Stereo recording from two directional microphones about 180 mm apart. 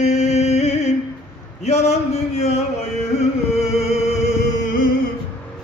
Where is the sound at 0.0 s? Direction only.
40° left (ahead or behind).